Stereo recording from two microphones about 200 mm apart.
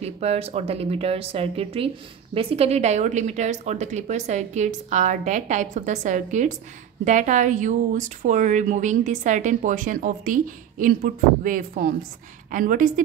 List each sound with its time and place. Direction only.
0.0 s speech: 30° right (ahead or behind)